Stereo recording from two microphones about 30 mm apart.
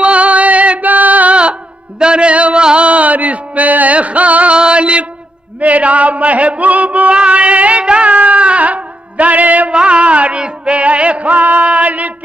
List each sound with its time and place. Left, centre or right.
0.0 s music: right
1.3 s music: right
4.6 s music: right
5.6 s music: right
9.7 s a sound: right
10.4 s music: right